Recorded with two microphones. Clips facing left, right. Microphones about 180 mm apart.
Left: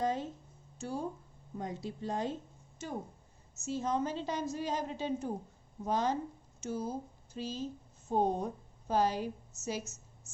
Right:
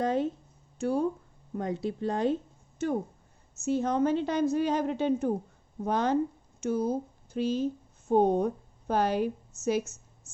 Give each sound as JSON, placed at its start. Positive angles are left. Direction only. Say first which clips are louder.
{"t": 0.0, "sound": "a woman's voice", "louder": "right 6 dB", "side_deg": -65}